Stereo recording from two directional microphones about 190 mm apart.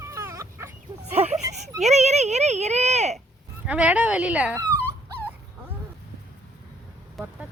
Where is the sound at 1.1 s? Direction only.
35° right (ahead or behind).